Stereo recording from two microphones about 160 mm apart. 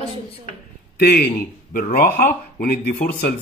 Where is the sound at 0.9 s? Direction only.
75° left (ahead or behind).